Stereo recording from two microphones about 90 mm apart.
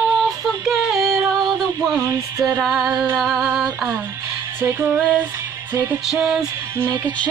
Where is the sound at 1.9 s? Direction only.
35° right (ahead or behind).